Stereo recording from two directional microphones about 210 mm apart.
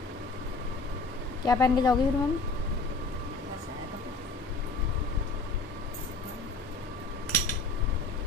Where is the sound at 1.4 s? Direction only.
15° left (ahead or behind).